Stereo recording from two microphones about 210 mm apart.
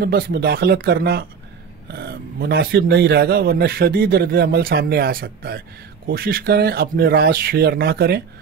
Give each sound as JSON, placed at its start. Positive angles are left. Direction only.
{"t": 0.0, "sound": "speech", "side_deg": -50}